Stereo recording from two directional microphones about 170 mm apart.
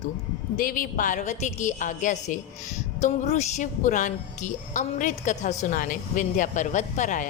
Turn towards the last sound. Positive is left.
turn(degrees=45)  # may be behind; listen again after turning